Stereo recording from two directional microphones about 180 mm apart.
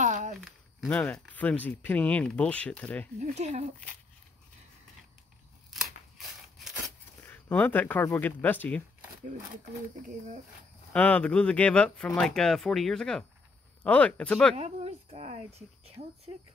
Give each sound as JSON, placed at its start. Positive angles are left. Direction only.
{"t": 0.0, "sound": "a sound", "side_deg": -45}
{"t": 0.5, "sound": "walk", "side_deg": 0}
{"t": 0.9, "sound": "speech", "side_deg": 5}
{"t": 3.2, "sound": "a woman's voice", "side_deg": -40}
{"t": 5.7, "sound": "scissors", "side_deg": 0}
{"t": 7.2, "sound": "speech", "side_deg": 10}
{"t": 10.9, "sound": "speech", "side_deg": 10}
{"t": 14.5, "sound": "a woman's voice", "side_deg": -35}